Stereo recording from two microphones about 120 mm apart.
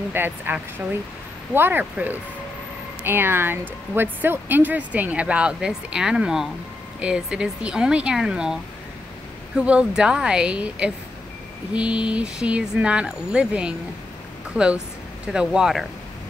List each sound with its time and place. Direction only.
0.1 s speech: 15° right (ahead or behind)
9.6 s speech: 10° right (ahead or behind)
15.3 s speech: 5° right (ahead or behind)